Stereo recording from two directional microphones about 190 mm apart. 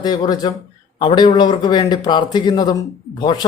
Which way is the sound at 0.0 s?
20° left (ahead or behind).